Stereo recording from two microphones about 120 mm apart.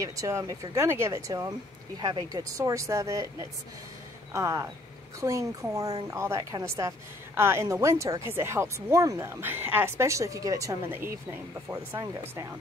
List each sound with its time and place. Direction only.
0.0 s speech: 25° right (ahead or behind)